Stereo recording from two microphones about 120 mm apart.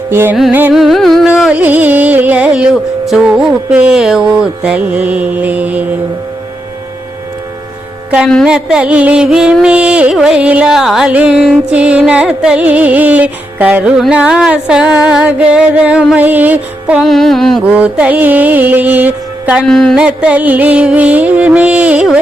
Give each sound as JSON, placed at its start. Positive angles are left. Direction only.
{"t": 0.1, "sound": "music", "side_deg": -20}
{"t": 0.7, "sound": "music", "side_deg": 0}
{"t": 1.3, "sound": "music", "side_deg": -10}
{"t": 8.4, "sound": "music", "side_deg": -5}
{"t": 17.0, "sound": "music", "side_deg": 0}
{"t": 17.7, "sound": "music", "side_deg": -10}
{"t": 19.6, "sound": "music", "side_deg": 5}
{"t": 20.0, "sound": "music", "side_deg": -10}